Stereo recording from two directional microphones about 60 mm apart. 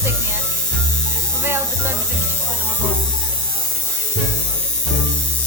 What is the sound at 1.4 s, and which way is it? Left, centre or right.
Electric shaver, right.